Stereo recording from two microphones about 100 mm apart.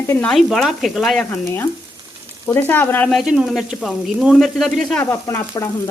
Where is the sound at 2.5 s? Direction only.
20° left (ahead or behind).